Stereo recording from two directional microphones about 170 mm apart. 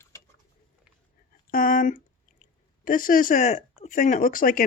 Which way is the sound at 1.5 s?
55° left (ahead or behind).